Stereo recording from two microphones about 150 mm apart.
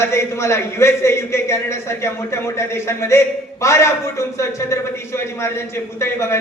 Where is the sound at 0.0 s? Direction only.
15° left (ahead or behind).